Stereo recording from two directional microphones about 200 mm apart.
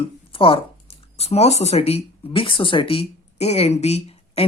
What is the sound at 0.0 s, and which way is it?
Speech, 25° left (ahead or behind).